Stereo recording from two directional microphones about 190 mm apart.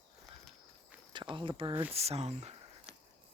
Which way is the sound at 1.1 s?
25° right (ahead or behind).